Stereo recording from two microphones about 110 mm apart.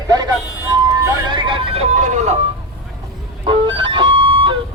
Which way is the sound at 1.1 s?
45° right (ahead or behind).